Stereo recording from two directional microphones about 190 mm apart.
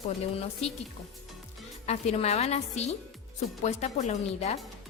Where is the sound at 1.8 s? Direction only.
35° left (ahead or behind).